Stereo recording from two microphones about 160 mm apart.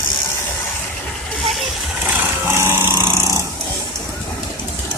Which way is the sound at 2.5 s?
15° right (ahead or behind).